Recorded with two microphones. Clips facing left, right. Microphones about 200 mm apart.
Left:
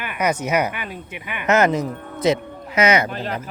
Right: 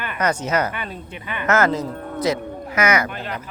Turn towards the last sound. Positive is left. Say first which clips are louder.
# left 3 dB
turn(degrees=35)  # may be behind; listen again after turning